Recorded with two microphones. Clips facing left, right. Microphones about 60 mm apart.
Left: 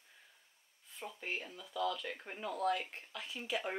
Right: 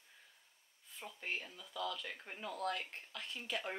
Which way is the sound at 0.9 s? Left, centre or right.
Centre.